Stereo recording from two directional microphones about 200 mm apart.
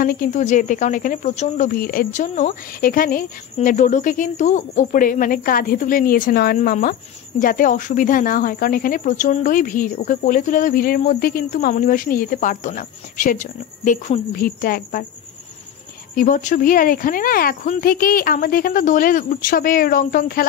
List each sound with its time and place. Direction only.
0.0 s speech: 45° left (ahead or behind)
16.2 s speech: 40° left (ahead or behind)